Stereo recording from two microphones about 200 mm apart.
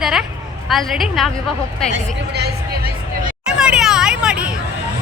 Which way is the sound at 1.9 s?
55° right (ahead or behind).